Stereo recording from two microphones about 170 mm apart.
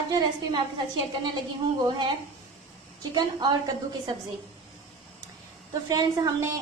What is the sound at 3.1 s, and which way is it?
Speech, 25° right (ahead or behind).